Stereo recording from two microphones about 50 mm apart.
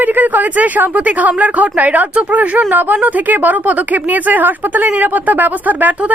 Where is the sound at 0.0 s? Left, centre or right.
Right.